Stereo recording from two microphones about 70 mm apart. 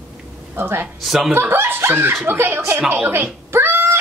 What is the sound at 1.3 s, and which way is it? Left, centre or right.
Speech, right.